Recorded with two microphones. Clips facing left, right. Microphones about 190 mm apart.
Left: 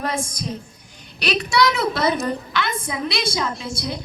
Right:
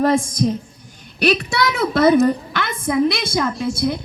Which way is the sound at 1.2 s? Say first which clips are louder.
Right 2 dB; 50° right (ahead or behind).